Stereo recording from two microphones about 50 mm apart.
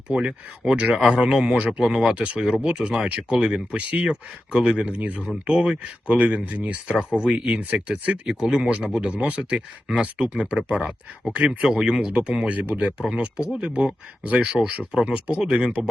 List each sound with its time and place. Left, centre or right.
0.1 s speech: centre
4.9 s speech: right
5.5 s speech: right